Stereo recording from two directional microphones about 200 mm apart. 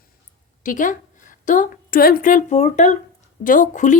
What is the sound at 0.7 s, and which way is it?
A woman's voice, 40° left (ahead or behind).